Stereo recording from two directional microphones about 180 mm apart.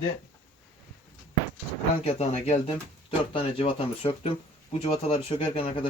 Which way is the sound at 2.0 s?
35° left (ahead or behind).